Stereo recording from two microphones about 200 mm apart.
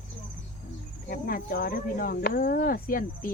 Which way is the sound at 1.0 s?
45° left (ahead or behind).